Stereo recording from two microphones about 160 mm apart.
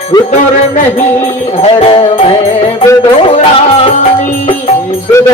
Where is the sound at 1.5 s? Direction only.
35° left (ahead or behind).